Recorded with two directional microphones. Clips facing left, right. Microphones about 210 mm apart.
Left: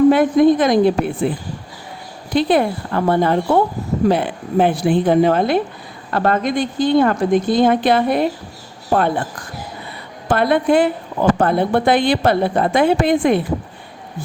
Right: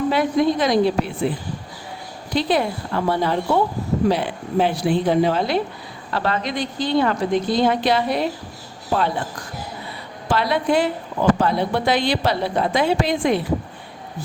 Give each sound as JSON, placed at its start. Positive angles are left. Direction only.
{"t": 0.1, "sound": "a woman's voice", "side_deg": 50}
{"t": 2.3, "sound": "a woman's voice", "side_deg": 55}
{"t": 10.2, "sound": "a woman's voice", "side_deg": 55}